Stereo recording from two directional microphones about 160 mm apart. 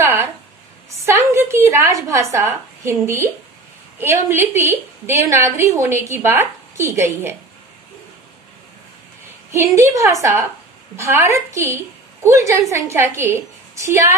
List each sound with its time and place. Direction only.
0.0 s a sound: 15° right (ahead or behind)
0.8 s a woman's voice: 20° right (ahead or behind)
9.8 s a woman's voice: 20° right (ahead or behind)